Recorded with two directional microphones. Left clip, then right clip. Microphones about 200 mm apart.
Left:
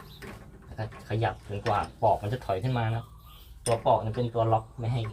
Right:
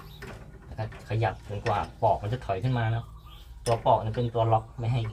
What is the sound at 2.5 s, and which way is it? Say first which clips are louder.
Speech: even; 15° left (ahead or behind).